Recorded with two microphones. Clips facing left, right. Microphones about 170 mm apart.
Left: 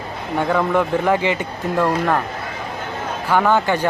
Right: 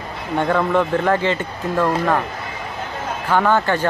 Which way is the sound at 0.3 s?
10° left (ahead or behind).